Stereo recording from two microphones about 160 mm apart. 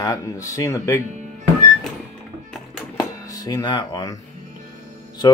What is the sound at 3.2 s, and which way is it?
Speech, 20° left (ahead or behind).